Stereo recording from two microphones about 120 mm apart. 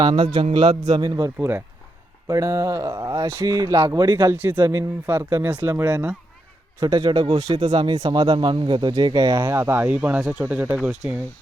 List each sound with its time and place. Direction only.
0.0 s a man's voice: 45° right (ahead or behind)
1.4 s speech: 20° right (ahead or behind)
6.7 s speech: 30° right (ahead or behind); by 10.8 s 15° right (ahead or behind)
10.8 s speech: 5° right (ahead or behind)